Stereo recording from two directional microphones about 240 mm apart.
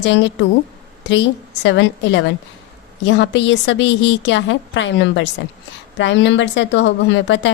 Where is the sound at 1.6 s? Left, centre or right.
Left.